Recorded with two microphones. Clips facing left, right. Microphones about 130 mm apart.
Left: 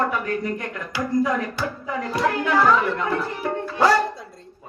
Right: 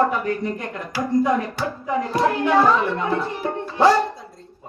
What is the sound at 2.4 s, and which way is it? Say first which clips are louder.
Speech: right 1 dB; 25° right (ahead or behind).